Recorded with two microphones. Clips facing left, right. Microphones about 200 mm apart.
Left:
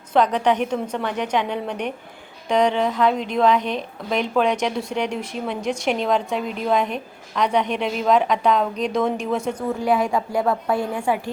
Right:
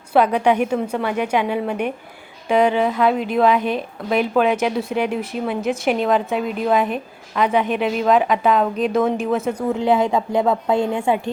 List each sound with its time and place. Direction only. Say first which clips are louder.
0.1 s a woman's voice: right 2 dB; 10° right (ahead or behind)
9.7 s a woman's voice: right 3 dB; 25° right (ahead or behind)